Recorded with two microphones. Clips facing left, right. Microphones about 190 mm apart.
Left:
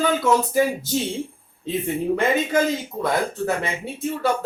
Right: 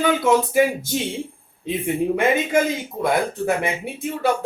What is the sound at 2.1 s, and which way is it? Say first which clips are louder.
Speech: even; 15° right (ahead or behind).